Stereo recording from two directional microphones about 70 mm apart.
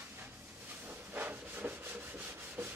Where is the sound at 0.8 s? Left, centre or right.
Right.